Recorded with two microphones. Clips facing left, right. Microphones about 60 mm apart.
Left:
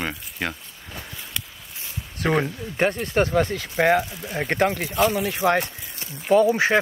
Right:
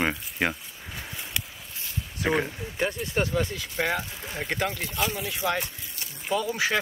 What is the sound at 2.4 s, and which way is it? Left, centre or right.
Speech, left.